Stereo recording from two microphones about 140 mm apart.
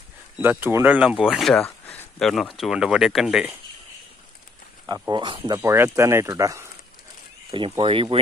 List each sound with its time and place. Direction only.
0.4 s speech: 15° right (ahead or behind)
1.6 s a sound: 15° left (ahead or behind)
2.1 s speech: centre (ahead or behind)
4.8 s speech: 25° right (ahead or behind)
5.6 s speech: 20° right (ahead or behind)
7.5 s speech: 40° right (ahead or behind)